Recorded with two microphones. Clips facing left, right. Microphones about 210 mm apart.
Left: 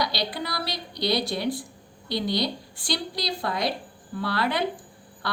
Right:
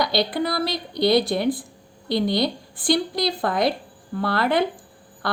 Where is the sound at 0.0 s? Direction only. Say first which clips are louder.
Right 7 dB; 50° right (ahead or behind).